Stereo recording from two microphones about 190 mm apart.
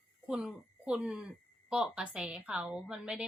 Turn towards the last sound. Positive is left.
turn(degrees=-5)  # may be behind; listen again after turning